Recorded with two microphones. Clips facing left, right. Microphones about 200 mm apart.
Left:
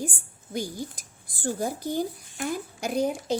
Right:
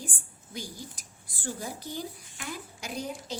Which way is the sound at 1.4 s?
50° left (ahead or behind).